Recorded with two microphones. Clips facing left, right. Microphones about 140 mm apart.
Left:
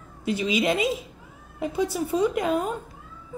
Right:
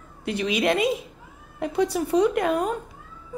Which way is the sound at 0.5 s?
Centre (ahead or behind).